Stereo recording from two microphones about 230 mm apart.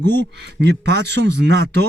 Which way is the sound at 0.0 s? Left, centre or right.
Right.